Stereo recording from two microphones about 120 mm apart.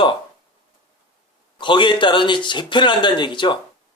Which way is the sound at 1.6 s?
40° left (ahead or behind).